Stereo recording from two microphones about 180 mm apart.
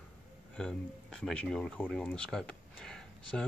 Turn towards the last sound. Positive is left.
turn(degrees=5)  # may be behind; listen again after turning